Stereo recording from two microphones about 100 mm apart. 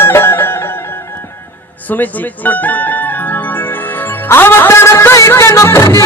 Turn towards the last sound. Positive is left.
turn(degrees=30)  # may be behind; listen again after turning